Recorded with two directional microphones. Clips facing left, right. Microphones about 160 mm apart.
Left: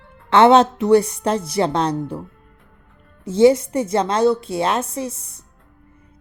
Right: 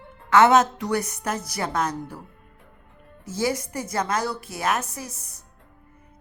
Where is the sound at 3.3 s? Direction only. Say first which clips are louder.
Left 13 dB; 25° left (ahead or behind).